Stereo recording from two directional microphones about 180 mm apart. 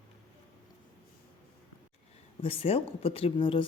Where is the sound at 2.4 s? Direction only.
30° left (ahead or behind).